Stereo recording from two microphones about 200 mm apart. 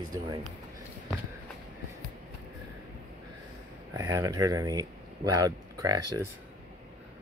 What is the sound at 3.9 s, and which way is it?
Speech, 15° right (ahead or behind).